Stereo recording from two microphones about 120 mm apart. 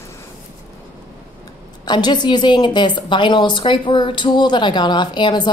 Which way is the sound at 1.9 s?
40° left (ahead or behind).